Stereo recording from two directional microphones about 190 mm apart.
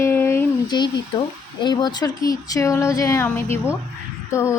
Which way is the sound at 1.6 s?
20° left (ahead or behind).